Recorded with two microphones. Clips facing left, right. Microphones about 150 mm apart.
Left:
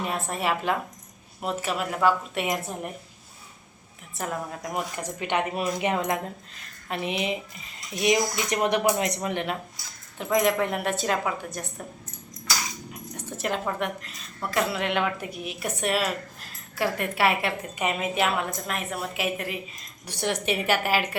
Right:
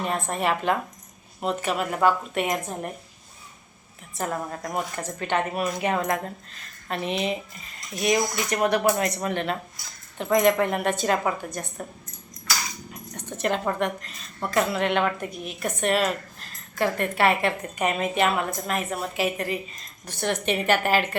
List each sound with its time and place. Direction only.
0.0 s a woman's voice: 5° left (ahead or behind)
4.2 s a woman's voice: 5° left (ahead or behind)
10.2 s a woman's voice: centre (ahead or behind)
12.9 s dog: 5° left (ahead or behind)
14.5 s a woman's voice: centre (ahead or behind)